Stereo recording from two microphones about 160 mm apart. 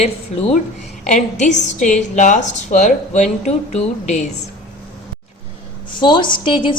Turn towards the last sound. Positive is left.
turn(degrees=30)  # may be behind; listen again after turning